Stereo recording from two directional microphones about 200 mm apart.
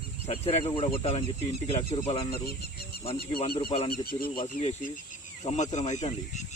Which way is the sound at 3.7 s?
30° left (ahead or behind).